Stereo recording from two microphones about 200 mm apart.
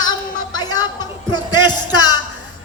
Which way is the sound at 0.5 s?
20° left (ahead or behind).